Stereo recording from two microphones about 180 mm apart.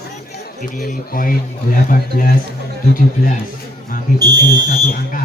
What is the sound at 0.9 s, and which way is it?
A man's voice, 50° left (ahead or behind).